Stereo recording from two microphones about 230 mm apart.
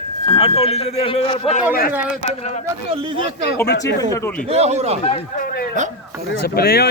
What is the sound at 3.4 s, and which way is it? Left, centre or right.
Speech, left.